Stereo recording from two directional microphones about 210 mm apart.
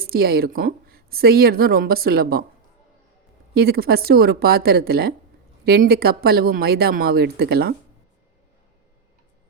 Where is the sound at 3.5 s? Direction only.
50° right (ahead or behind).